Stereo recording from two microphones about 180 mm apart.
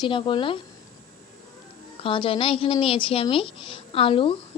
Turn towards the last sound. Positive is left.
turn(degrees=30)  # may be behind; listen again after turning